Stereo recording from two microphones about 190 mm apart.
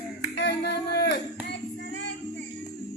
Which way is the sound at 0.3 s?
60° left (ahead or behind).